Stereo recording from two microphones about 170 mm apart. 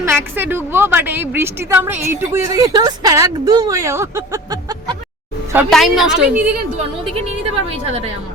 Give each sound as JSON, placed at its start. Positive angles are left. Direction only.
{"t": 0.0, "sound": "a woman's voice", "side_deg": -15}
{"t": 5.7, "sound": "a woman's voice", "side_deg": 0}